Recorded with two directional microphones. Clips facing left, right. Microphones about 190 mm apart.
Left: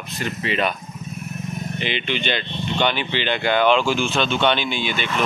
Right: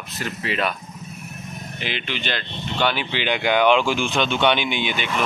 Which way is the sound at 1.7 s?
5° right (ahead or behind).